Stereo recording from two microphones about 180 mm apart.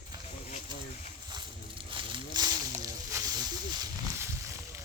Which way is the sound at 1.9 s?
25° right (ahead or behind).